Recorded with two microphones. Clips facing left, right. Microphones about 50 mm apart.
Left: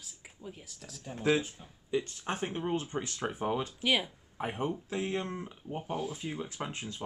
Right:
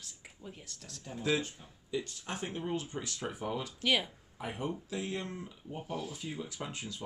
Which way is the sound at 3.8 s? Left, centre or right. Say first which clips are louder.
Even; centre.